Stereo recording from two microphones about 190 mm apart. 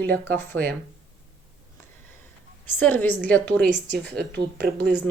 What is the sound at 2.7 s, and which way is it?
Speech, 10° left (ahead or behind).